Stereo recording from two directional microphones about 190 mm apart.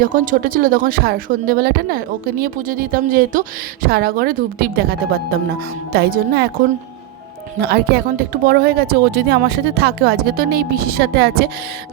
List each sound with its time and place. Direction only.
0.0 s a woman's voice: 45° right (ahead or behind)
7.6 s speech: 55° right (ahead or behind)